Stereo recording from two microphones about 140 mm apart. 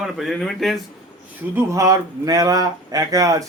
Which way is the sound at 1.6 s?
25° right (ahead or behind).